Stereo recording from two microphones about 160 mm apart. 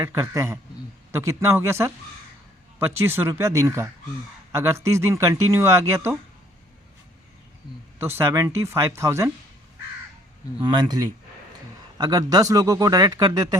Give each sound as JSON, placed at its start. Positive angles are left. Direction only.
{"t": 0.0, "sound": "speech", "side_deg": -15}
{"t": 7.9, "sound": "speech", "side_deg": -15}
{"t": 10.6, "sound": "a man's voice", "side_deg": -25}